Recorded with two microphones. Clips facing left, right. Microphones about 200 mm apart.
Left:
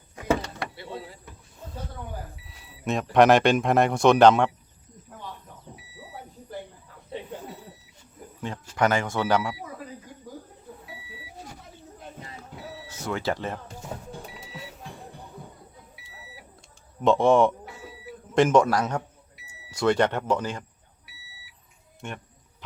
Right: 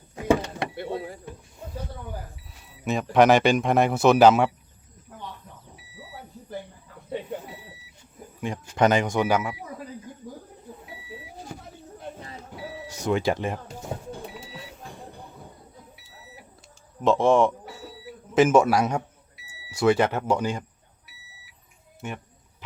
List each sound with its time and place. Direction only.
0.2 s door: 20° right (ahead or behind)
0.8 s speech: 50° right (ahead or behind)
2.5 s speech: centre (ahead or behind)
8.7 s speech: 20° right (ahead or behind)
12.9 s speech: 15° right (ahead or behind)
17.0 s speech: centre (ahead or behind)